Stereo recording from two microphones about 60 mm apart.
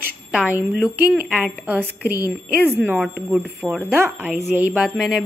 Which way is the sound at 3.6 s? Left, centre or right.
Centre.